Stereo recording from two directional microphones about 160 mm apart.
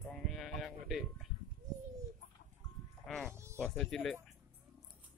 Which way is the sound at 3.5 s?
5° left (ahead or behind).